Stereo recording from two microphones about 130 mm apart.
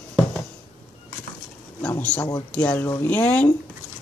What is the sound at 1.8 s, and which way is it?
Speech, 10° left (ahead or behind).